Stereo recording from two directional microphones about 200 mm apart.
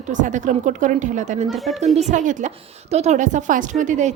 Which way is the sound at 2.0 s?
35° right (ahead or behind).